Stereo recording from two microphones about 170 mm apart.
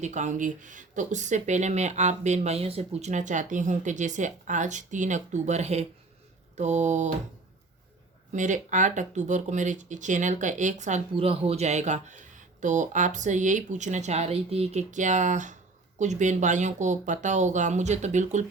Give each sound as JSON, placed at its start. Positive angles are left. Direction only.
{"t": 0.0, "sound": "speech", "side_deg": -45}
{"t": 8.3, "sound": "speech", "side_deg": -45}